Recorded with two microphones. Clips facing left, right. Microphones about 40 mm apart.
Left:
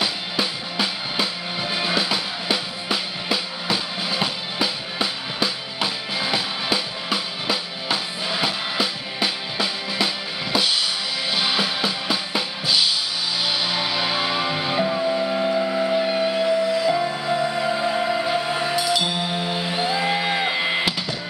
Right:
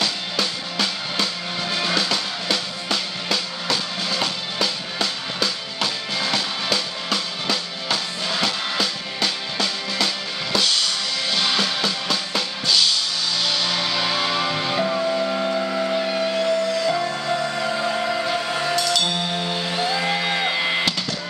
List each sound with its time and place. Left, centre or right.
0.0 s music: centre
11.3 s drum kit: centre
13.4 s music: centre
14.9 s a sound: centre
16.0 s music: centre